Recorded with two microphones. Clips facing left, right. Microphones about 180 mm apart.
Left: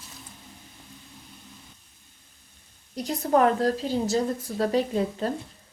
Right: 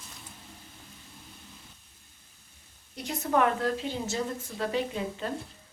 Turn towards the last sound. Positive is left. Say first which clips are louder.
# left 6 dB
turn(degrees=40)  # may be behind; listen again after turning